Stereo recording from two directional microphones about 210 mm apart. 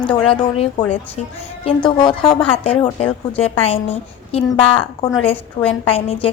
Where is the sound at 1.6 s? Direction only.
20° left (ahead or behind).